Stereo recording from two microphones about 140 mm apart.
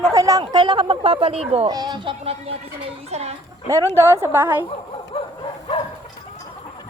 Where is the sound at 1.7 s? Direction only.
30° right (ahead or behind); by 3.3 s 50° right (ahead or behind).